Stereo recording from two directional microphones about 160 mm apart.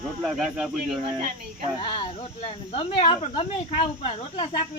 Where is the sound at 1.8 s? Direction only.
35° left (ahead or behind).